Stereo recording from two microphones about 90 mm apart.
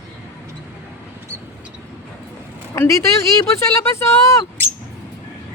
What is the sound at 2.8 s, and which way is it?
Speech, 35° left (ahead or behind).